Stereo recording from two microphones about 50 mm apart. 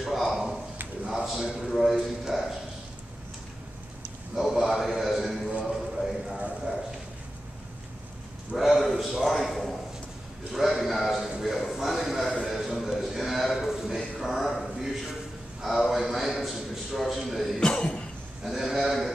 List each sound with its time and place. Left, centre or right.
0.0 s a sound: centre
1.1 s a man's voice: centre
4.4 s a man's voice: centre
5.7 s clip-clop: centre
8.5 s a man's voice: centre
12.4 s a sound: centre
15.9 s a sound: centre
17.6 s cough: centre
18.4 s sheep: centre